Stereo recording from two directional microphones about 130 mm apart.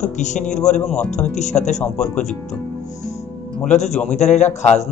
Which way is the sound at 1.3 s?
65° left (ahead or behind).